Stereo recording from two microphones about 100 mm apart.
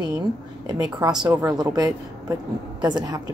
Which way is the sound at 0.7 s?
45° right (ahead or behind).